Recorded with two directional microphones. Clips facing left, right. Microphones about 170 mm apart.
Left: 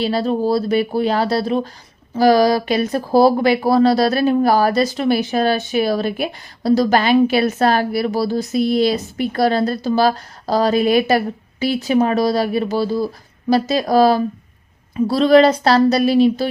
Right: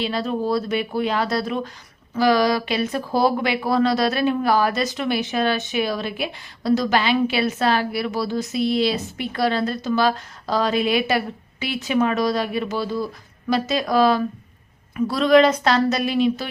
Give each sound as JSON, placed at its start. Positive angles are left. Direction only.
{"t": 0.0, "sound": "speech", "side_deg": 35}